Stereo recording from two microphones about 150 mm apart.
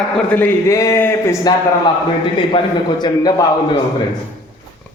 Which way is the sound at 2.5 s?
30° left (ahead or behind).